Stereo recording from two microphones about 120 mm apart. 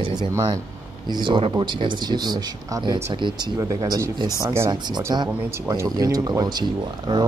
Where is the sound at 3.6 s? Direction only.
30° right (ahead or behind).